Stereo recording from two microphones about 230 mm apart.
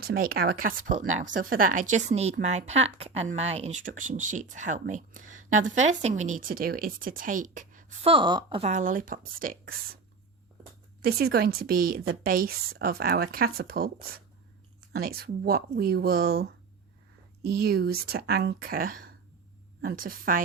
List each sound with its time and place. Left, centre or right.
0.1 s speech: right
11.0 s speech: right
14.9 s speech: right
17.6 s speech: right